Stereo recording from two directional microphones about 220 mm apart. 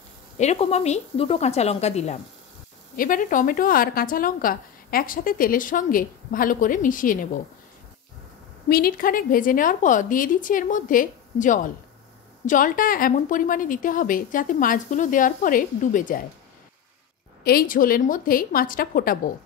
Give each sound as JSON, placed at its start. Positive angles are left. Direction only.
{"t": 0.4, "sound": "a woman's voice", "side_deg": 30}
{"t": 8.6, "sound": "a woman's voice", "side_deg": 45}
{"t": 17.4, "sound": "a woman's voice", "side_deg": 45}